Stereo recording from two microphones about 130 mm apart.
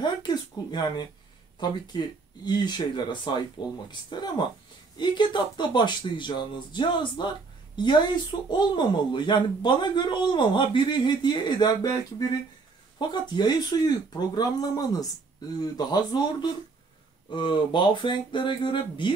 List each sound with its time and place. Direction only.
0.0 s a sound: 35° left (ahead or behind)
1.6 s speech: 35° left (ahead or behind)
13.1 s speech: 35° left (ahead or behind)